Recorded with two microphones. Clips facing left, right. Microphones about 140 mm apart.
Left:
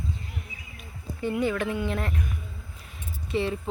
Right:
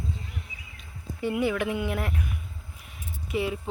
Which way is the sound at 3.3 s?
5° right (ahead or behind).